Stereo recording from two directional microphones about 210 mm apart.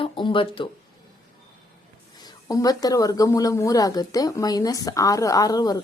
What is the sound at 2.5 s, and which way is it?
Speech, 15° left (ahead or behind).